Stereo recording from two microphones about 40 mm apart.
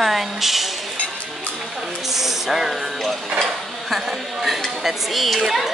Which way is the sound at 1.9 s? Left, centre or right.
Centre.